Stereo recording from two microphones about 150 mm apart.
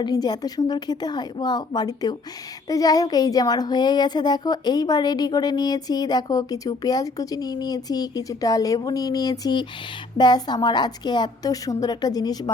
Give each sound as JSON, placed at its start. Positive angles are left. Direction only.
{"t": 0.0, "sound": "speech", "side_deg": 25}